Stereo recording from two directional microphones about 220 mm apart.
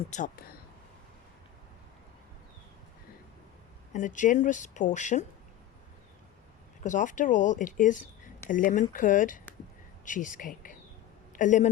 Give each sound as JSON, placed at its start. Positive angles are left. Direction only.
{"t": 0.1, "sound": "speech", "side_deg": 40}
{"t": 3.9, "sound": "speech", "side_deg": 35}
{"t": 6.8, "sound": "speech", "side_deg": 35}